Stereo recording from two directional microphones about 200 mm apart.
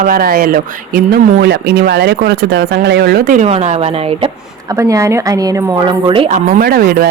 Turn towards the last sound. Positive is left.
turn(degrees=-45)  # may be behind; listen again after turning